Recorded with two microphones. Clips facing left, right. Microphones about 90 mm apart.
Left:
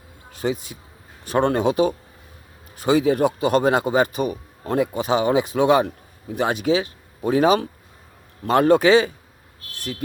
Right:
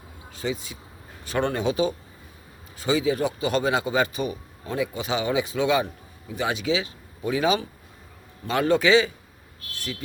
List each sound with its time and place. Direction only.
0.3 s a man's voice: 55° left (ahead or behind)